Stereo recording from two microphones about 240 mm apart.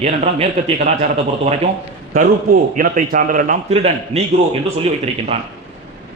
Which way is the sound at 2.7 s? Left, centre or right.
Right.